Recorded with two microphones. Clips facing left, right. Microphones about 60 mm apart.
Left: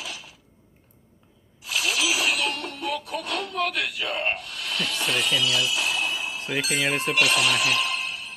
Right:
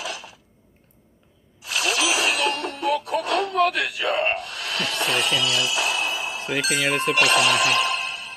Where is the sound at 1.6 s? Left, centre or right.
Right.